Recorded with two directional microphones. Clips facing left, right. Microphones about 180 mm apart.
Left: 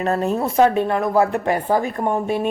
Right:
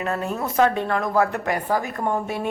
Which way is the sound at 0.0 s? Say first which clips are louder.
Left 6 dB; 35° left (ahead or behind).